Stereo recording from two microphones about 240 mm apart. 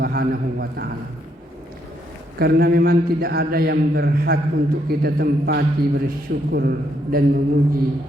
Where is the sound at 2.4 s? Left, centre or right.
Right.